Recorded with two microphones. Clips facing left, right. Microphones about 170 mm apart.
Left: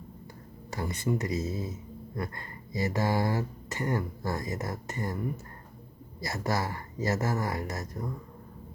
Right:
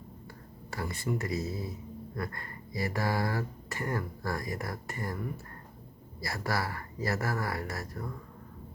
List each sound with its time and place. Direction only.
0.7 s speech: 20° left (ahead or behind)